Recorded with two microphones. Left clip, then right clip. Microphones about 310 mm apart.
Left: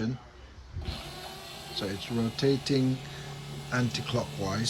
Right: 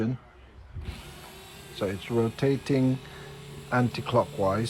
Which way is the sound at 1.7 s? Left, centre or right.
Centre.